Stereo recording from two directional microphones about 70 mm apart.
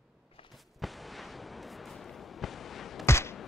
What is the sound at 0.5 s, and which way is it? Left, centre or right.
Artillery fire, centre.